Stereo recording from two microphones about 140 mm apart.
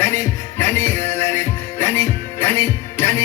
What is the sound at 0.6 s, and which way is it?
Music, 15° left (ahead or behind).